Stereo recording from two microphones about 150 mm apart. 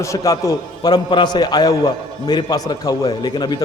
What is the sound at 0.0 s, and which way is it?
A man's voice, 20° left (ahead or behind).